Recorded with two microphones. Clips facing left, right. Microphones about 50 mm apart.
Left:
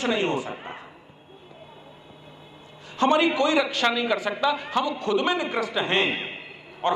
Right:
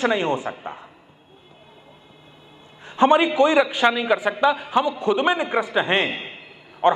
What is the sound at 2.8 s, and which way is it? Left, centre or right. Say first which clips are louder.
A man's voice: right 4 dB; right.